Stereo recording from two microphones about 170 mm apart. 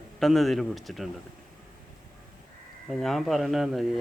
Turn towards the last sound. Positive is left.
turn(degrees=0)  # may be behind; listen again after turning